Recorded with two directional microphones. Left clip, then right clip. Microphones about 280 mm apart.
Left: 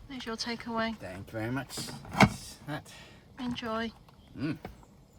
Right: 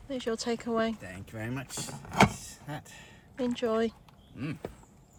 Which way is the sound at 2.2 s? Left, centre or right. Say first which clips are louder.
Even; centre.